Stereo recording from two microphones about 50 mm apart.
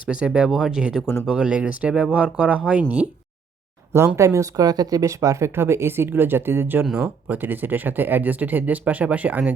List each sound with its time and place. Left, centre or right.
0.1 s speech: centre
1.0 s speech: left
1.3 s speech: centre
4.2 s speech: right
5.5 s speech: right
6.9 s speech: right
7.3 s speech: right